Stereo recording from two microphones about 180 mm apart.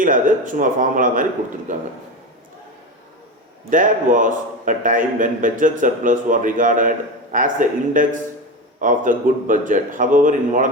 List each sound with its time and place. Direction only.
0.0 s a man's voice: 45° right (ahead or behind)
3.7 s a man's voice: 45° right (ahead or behind)